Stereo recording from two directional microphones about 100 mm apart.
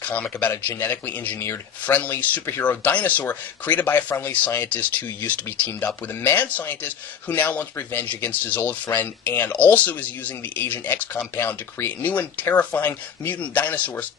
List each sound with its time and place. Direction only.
0.0 s speech: 15° left (ahead or behind)